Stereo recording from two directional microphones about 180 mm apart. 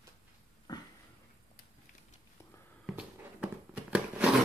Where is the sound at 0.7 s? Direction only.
20° left (ahead or behind).